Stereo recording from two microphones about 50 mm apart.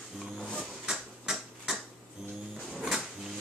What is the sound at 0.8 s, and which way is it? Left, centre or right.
Tick-tock, centre.